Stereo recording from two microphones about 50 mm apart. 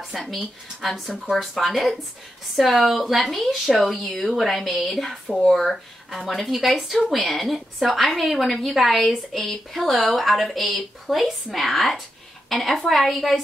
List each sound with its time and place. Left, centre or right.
0.0 s a woman's voice: centre